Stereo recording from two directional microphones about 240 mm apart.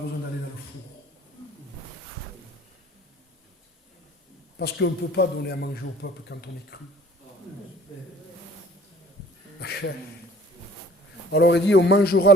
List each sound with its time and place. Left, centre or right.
4.5 s a man's voice: left
9.6 s a sound: left
11.3 s a man's voice: left